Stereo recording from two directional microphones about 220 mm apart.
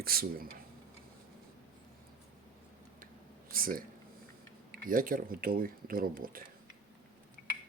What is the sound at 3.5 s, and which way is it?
Speech, 40° right (ahead or behind).